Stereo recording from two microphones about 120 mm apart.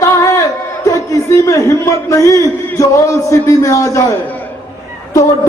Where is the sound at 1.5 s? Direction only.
25° left (ahead or behind).